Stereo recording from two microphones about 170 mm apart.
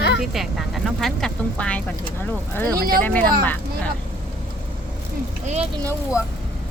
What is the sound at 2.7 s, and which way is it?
Speech, 60° right (ahead or behind).